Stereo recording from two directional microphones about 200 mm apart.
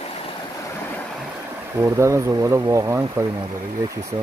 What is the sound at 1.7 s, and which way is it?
Speech, 15° right (ahead or behind).